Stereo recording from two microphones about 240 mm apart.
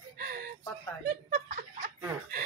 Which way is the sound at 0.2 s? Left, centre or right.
Right.